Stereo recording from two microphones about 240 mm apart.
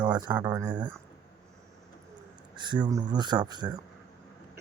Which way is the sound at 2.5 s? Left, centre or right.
Centre.